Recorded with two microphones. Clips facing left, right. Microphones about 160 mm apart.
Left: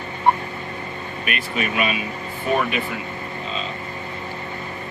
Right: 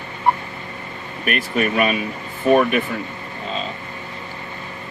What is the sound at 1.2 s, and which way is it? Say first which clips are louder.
Speech: right 6 dB; 45° right (ahead or behind).